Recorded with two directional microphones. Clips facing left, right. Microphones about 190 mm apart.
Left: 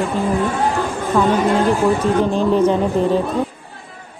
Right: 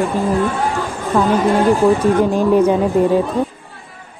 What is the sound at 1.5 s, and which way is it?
Speech, 15° right (ahead or behind).